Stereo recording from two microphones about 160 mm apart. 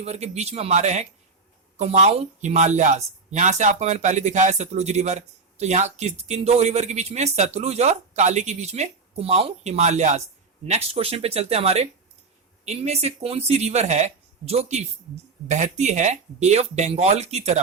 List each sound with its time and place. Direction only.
0.0 s speech: 40° right (ahead or behind)